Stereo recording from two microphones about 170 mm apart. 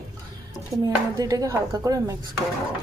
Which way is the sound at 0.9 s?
20° right (ahead or behind).